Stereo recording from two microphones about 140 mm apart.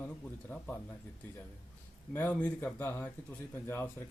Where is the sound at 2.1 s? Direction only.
10° left (ahead or behind).